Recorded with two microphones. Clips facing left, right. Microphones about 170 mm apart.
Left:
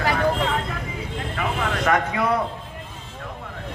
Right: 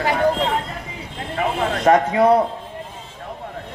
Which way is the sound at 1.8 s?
35° right (ahead or behind).